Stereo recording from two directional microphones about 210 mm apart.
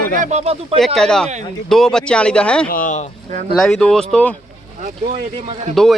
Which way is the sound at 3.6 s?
Centre (ahead or behind).